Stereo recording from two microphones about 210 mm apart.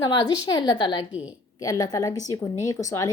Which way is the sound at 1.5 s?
15° left (ahead or behind).